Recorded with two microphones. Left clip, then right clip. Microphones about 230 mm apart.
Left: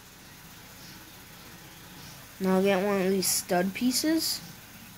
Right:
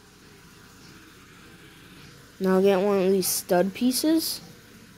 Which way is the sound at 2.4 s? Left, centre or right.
Centre.